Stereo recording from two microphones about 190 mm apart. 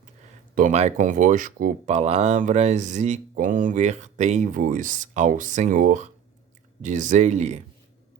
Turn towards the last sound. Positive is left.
turn(degrees=-40)  # may be behind; listen again after turning